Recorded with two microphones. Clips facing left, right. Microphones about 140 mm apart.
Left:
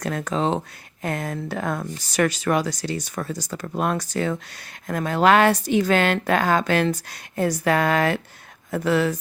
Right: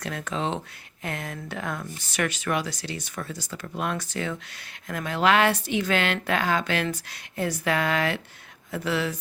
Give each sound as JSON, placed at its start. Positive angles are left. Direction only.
{"t": 0.0, "sound": "speech", "side_deg": 40}